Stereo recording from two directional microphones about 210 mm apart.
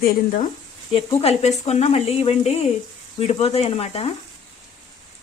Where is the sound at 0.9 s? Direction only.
30° left (ahead or behind).